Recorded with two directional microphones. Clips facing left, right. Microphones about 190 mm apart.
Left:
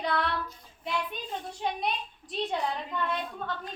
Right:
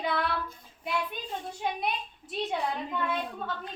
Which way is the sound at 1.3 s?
5° right (ahead or behind).